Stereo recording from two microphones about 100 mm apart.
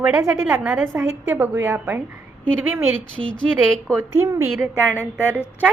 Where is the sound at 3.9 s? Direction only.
25° right (ahead or behind).